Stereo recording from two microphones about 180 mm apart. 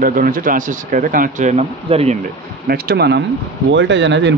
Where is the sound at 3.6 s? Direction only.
85° right.